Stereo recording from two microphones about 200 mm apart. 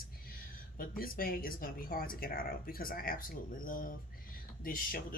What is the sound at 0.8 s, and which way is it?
Speech, 45° left (ahead or behind).